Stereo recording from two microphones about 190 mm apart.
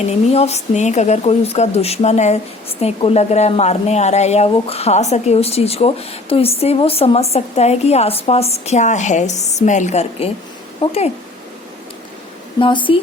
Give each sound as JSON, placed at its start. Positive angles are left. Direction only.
{"t": 0.1, "sound": "a woman's voice", "side_deg": 35}
{"t": 12.5, "sound": "speech", "side_deg": 25}